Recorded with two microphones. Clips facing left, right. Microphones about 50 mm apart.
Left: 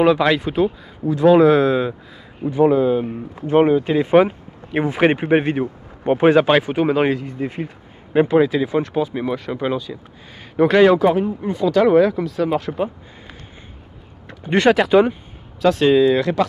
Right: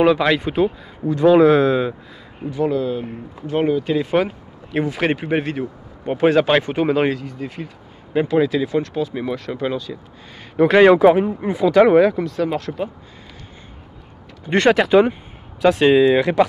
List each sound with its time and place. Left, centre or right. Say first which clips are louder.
0.0 s speech: even; centre
2.4 s speech: left 5 dB; left
6.3 s speech: left 1 dB; centre
7.1 s speech: left 2 dB; left
10.5 s speech: right 1 dB; centre
12.0 s speech: right 1 dB; centre
14.5 s speech: even; centre
15.6 s speech: right 1 dB; centre